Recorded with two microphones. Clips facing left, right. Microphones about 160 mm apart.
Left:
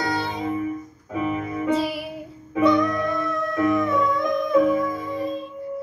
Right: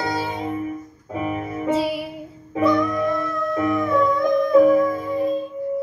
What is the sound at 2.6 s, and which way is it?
Music, centre (ahead or behind).